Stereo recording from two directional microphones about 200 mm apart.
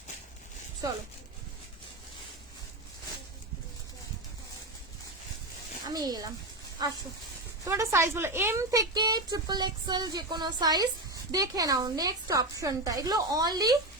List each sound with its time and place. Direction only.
5.9 s a woman's voice: 20° right (ahead or behind)